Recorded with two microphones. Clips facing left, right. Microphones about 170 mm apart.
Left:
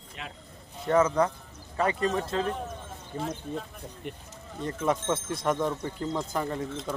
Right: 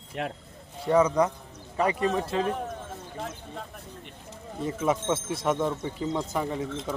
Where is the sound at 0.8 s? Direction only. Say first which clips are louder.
Right 1 dB; 10° right (ahead or behind).